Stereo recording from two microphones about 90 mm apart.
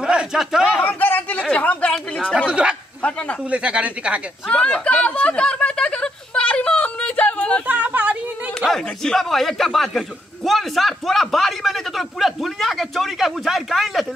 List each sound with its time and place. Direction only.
0.0 s a man's voice: 10° right (ahead or behind)
0.8 s speech: 20° left (ahead or behind)
2.3 s speech: 10° right (ahead or behind)
3.0 s a man's voice: 15° left (ahead or behind)
3.4 s speech: 15° right (ahead or behind)
4.5 s a sound: 10° left (ahead or behind)
7.6 s a sound: 15° right (ahead or behind)
8.5 s a man's voice: 5° left (ahead or behind)